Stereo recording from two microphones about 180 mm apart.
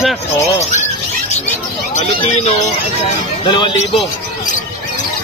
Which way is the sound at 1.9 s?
35° left (ahead or behind).